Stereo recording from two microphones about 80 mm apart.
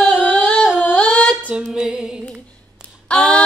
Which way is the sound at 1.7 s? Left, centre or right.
Centre.